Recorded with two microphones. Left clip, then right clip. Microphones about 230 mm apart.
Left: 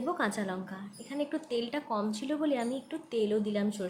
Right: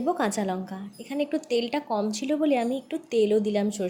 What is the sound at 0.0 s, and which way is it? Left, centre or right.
A woman's voice, right.